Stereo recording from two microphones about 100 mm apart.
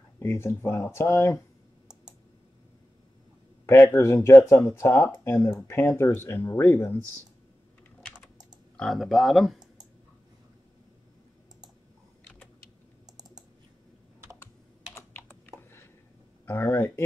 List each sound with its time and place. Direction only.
0.2 s speech: 25° left (ahead or behind)
3.6 s speech: 25° left (ahead or behind)
8.7 s speech: centre (ahead or behind)
15.0 s typing: 20° left (ahead or behind)
16.4 s speech: 25° left (ahead or behind)